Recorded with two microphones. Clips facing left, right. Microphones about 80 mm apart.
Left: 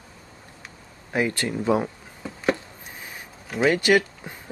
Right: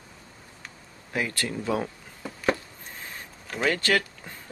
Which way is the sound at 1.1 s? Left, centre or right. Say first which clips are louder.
Left 5 dB; left.